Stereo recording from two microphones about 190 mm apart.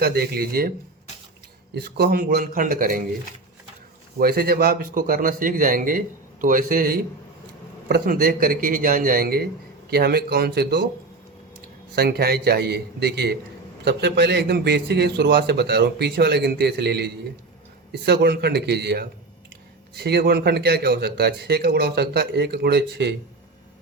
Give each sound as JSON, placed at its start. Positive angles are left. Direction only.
{"t": 0.0, "sound": "a man's voice", "side_deg": -55}
{"t": 1.7, "sound": "a man's voice", "side_deg": -55}
{"t": 4.2, "sound": "a man's voice", "side_deg": -55}
{"t": 11.9, "sound": "a man's voice", "side_deg": -55}